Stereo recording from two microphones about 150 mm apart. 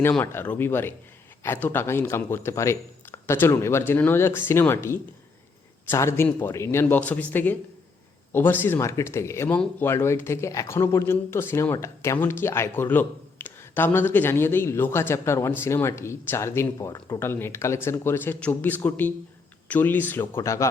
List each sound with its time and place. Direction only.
0.1 s speech: 15° left (ahead or behind)